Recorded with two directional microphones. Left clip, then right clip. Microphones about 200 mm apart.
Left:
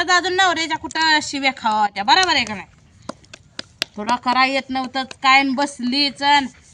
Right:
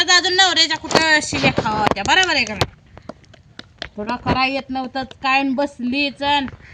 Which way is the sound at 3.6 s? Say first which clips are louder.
Left 3 dB; 15° left (ahead or behind).